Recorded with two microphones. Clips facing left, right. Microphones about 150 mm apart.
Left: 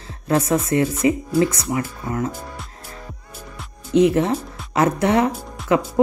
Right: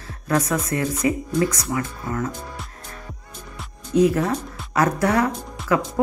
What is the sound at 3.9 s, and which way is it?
Speech, 25° left (ahead or behind).